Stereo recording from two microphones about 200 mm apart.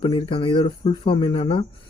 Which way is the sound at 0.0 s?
25° left (ahead or behind).